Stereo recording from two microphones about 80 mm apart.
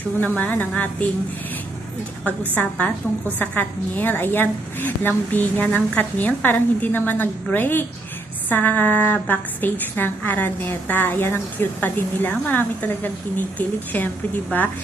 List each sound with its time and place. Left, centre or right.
0.3 s a woman's voice: centre
2.6 s a woman's voice: centre